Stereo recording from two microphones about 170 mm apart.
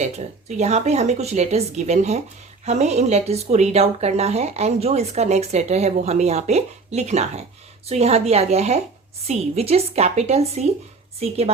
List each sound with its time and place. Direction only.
0.0 s speech: 40° right (ahead or behind)